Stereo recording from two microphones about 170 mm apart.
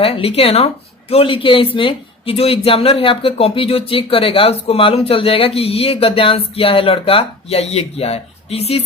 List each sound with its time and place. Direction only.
0.0 s speech: 35° left (ahead or behind)